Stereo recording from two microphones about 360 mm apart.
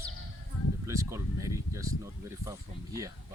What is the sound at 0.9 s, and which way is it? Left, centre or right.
Speech, centre.